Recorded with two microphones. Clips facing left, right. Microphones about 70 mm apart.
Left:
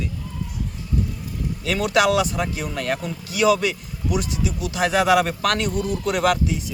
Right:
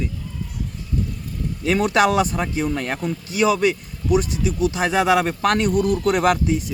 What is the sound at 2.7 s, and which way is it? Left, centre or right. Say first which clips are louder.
Speech: right 1 dB; right.